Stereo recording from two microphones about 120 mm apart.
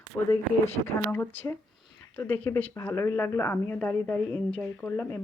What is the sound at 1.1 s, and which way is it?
Speech, 15° left (ahead or behind).